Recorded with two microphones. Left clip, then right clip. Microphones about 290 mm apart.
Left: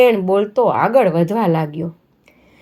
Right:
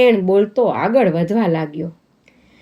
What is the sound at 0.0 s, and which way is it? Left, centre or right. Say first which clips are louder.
Speech: even; centre.